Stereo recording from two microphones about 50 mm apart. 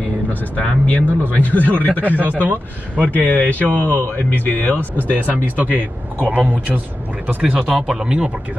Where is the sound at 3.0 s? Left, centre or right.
Left.